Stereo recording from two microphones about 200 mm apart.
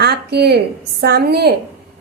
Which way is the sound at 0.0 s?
55° right (ahead or behind).